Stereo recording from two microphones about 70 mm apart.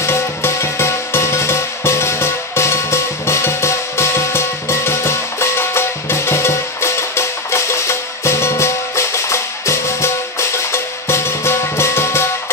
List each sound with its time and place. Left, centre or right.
0.0 s music: left